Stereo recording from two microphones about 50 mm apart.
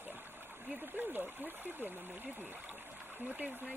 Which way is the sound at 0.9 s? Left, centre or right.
Right.